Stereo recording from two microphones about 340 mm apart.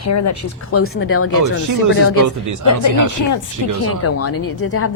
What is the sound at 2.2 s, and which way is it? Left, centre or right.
Speech, right.